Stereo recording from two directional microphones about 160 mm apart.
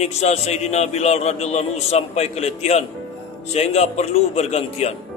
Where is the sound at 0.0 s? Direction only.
40° left (ahead or behind).